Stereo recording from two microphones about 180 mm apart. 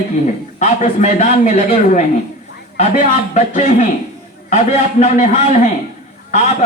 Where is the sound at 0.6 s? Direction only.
40° left (ahead or behind).